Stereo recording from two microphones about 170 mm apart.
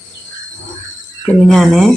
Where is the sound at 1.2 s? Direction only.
Centre (ahead or behind).